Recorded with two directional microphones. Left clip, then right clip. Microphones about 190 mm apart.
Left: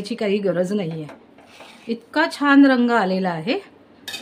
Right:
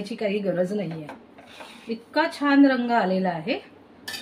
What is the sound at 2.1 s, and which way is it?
A woman's voice, 60° left (ahead or behind).